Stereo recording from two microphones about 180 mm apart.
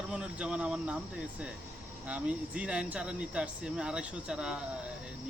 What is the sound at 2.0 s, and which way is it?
Speech, 5° right (ahead or behind).